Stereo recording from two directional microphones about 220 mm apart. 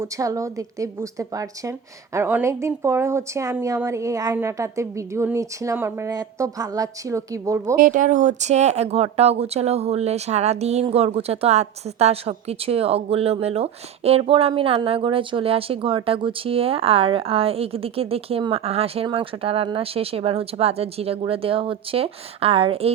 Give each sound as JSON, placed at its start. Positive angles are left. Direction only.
{"t": 0.0, "sound": "a woman's voice", "side_deg": -15}
{"t": 7.8, "sound": "speech", "side_deg": -35}